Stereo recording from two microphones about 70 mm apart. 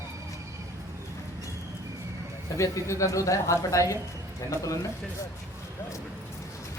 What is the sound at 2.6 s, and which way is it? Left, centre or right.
Speech, left.